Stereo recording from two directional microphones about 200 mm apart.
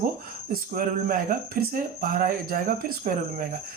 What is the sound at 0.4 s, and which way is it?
Speech, 45° right (ahead or behind).